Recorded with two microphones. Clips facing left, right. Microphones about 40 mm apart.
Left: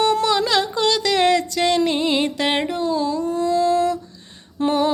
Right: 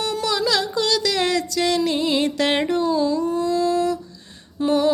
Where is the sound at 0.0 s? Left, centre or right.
Left.